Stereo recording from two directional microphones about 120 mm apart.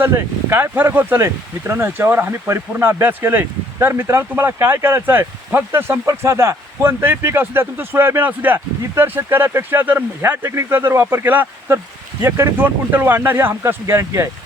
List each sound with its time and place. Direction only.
0.0 s speech: 20° right (ahead or behind)